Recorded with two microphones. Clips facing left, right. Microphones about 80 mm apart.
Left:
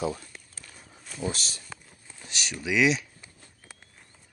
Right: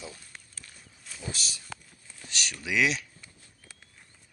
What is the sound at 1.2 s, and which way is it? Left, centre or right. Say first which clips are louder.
Speech: left 6 dB; left.